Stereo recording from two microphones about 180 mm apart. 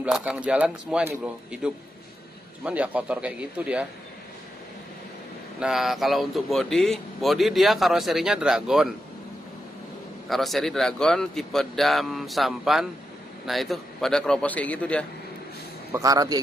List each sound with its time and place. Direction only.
0.0 s speech: 5° right (ahead or behind)
5.6 s speech: centre (ahead or behind)
10.3 s speech: centre (ahead or behind)
15.9 s a man's voice: 20° right (ahead or behind)